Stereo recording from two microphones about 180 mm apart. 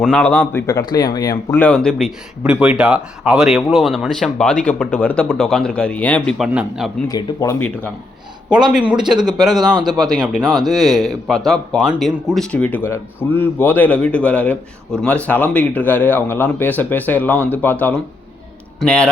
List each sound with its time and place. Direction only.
0.0 s speech: 5° left (ahead or behind)
0.7 s speech: 20° left (ahead or behind)
1.5 s speech: 5° left (ahead or behind)
6.5 s speech: 5° right (ahead or behind)
7.1 s speech: 20° left (ahead or behind)
8.7 s speech: 5° right (ahead or behind)
9.6 s speech: 25° right (ahead or behind)
9.8 s speech: 5° right (ahead or behind)
10.4 s speech: 20° right (ahead or behind)
10.7 s speech: centre (ahead or behind)